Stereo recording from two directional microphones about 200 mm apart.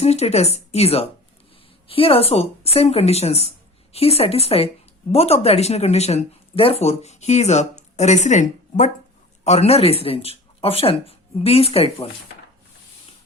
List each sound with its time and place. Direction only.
0.0 s speech: 30° left (ahead or behind)